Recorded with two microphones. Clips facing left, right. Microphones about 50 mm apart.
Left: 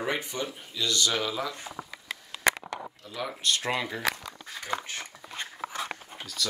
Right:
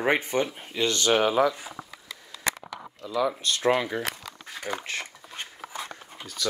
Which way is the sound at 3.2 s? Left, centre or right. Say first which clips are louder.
Right 3 dB; right.